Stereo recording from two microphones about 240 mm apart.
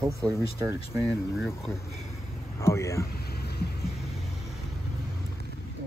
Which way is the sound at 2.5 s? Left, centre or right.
Centre.